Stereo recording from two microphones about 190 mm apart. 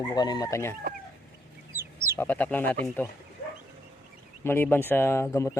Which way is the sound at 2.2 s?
10° left (ahead or behind).